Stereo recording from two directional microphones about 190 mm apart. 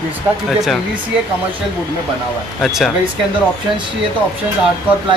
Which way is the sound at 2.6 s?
Centre (ahead or behind).